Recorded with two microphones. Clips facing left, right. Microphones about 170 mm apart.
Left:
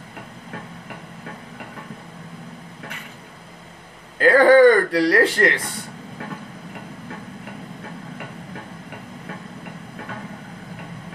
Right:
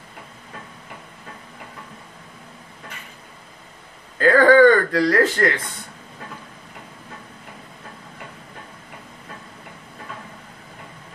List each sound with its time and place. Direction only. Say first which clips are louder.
4.2 s speech: left 1 dB; 30° left (ahead or behind)